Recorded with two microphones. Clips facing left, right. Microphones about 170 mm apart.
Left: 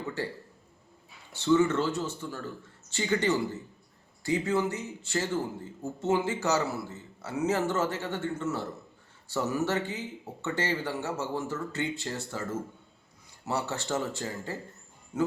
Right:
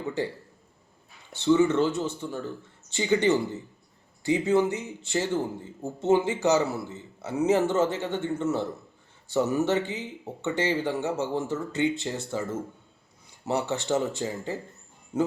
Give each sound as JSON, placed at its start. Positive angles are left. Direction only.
{"t": 1.4, "sound": "speech", "side_deg": -15}